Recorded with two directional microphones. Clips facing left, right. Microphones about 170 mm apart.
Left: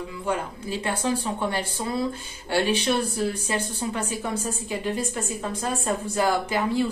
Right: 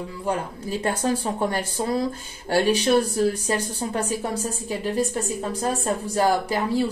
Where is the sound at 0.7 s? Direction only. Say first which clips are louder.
Right 3 dB; 45° right (ahead or behind).